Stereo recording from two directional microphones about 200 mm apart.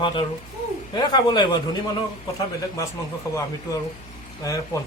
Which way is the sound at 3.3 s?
15° left (ahead or behind).